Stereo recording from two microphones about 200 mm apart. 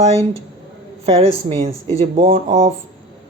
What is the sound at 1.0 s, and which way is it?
Speech, 30° right (ahead or behind).